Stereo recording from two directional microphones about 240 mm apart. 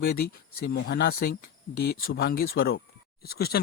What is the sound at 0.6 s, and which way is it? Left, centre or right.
Speech, left.